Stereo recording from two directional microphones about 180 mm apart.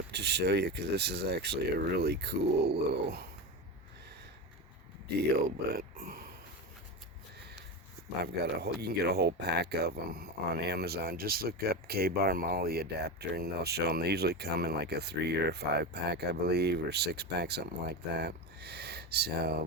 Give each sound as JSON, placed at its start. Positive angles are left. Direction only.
{"t": 0.1, "sound": "speech", "side_deg": -70}
{"t": 5.4, "sound": "speech", "side_deg": -55}
{"t": 8.2, "sound": "speech", "side_deg": -65}